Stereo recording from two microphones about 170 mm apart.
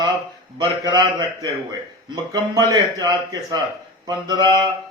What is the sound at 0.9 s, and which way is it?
A man's voice, 25° right (ahead or behind).